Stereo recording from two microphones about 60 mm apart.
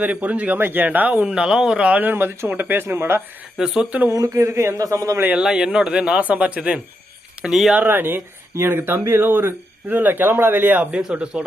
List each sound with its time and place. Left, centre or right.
0.0 s speech: right
1.3 s speech: centre; by 3.2 s right
3.6 s speech: centre
4.1 s speech: right
4.8 s a man's voice: right
5.4 s speech: centre
6.6 s speech: centre
7.8 s speech: right
11.0 s speech: centre